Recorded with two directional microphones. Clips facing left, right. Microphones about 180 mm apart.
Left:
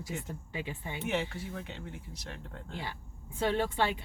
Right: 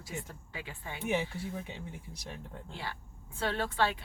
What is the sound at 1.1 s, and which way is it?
Speech, 10° right (ahead or behind).